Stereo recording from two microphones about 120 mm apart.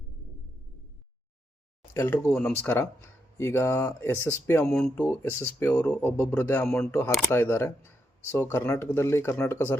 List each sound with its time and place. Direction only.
1.9 s speech: 20° left (ahead or behind)
7.3 s speech: 20° left (ahead or behind)